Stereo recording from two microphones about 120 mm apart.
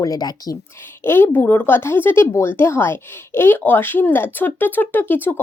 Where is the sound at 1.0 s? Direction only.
20° left (ahead or behind).